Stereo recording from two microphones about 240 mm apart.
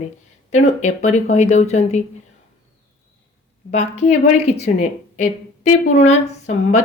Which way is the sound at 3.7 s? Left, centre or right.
Left.